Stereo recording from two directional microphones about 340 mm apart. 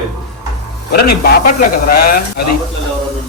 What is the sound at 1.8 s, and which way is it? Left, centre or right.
Speech, left.